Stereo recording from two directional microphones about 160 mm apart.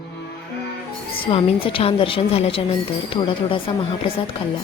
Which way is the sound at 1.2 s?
35° left (ahead or behind).